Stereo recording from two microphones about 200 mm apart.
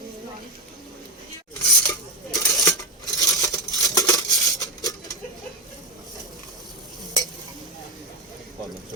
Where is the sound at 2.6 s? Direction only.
15° left (ahead or behind).